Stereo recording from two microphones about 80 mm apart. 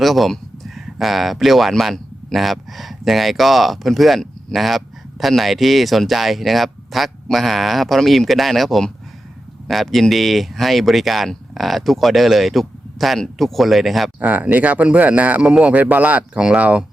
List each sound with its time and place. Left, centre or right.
0.0 s speech: centre
14.2 s speech: centre